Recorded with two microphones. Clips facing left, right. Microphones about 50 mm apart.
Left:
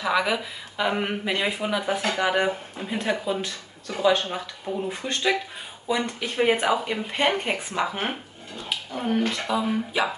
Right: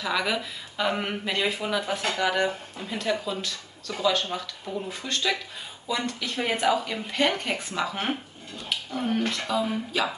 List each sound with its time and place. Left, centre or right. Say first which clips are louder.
0.0 s speech: left 3 dB; centre